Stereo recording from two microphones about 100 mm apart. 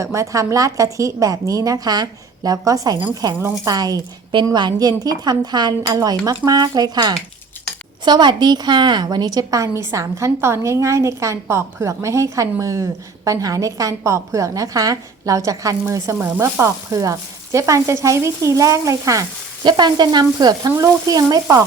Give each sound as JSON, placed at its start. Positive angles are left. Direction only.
{"t": 0.0, "sound": "a woman's voice", "side_deg": -30}
{"t": 19.6, "sound": "frying", "side_deg": -45}
{"t": 20.7, "sound": "a woman's voice", "side_deg": -35}